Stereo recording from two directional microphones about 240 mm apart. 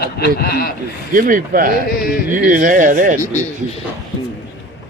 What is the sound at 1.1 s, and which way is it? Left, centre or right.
Speech, right.